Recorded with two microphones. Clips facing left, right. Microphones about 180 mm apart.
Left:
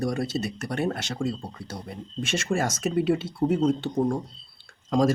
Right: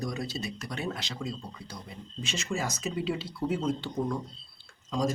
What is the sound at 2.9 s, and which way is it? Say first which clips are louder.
Speech: left 10 dB; 50° left (ahead or behind).